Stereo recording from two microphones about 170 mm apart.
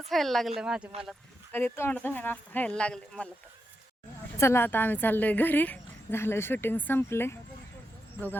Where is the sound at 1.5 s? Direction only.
15° left (ahead or behind).